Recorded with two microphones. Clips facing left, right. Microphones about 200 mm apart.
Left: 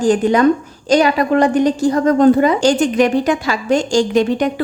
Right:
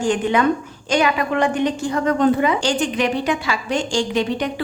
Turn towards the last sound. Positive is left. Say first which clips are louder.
# left 6 dB
turn(degrees=45)  # may be behind; listen again after turning